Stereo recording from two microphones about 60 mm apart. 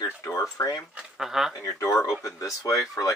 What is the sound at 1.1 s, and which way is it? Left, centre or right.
Speech, centre.